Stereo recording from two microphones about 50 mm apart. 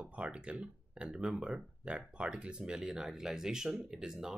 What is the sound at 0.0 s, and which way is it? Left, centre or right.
Speech, right.